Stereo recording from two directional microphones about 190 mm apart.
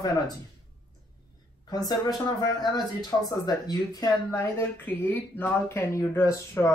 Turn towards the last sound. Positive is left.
turn(degrees=15)  # may be behind; listen again after turning